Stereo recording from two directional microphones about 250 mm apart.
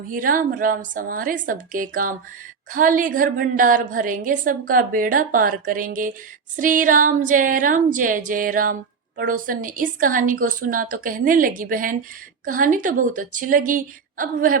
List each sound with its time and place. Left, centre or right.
0.1 s a woman's voice: right